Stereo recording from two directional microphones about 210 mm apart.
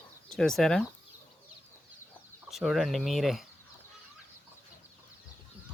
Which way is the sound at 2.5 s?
Centre (ahead or behind).